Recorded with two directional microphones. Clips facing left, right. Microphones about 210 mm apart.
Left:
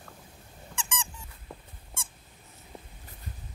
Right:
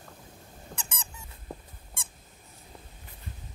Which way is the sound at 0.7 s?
40° right (ahead or behind).